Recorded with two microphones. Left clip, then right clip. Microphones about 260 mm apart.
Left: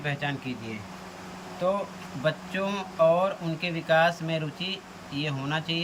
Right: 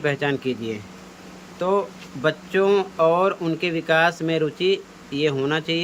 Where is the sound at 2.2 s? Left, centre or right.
Centre.